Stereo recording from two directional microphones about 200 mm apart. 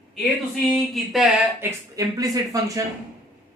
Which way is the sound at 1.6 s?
15° right (ahead or behind).